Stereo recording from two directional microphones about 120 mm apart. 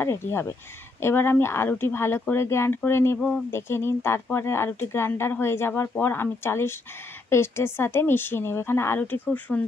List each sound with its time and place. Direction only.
0.0 s speech: 20° left (ahead or behind)